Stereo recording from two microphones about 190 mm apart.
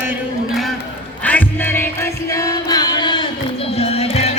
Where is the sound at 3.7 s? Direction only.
30° left (ahead or behind).